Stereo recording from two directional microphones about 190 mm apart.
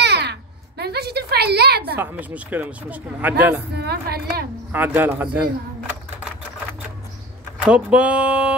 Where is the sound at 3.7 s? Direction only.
60° right (ahead or behind).